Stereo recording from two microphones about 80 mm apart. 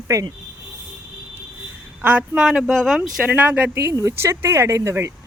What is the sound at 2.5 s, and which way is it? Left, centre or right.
Speech, centre.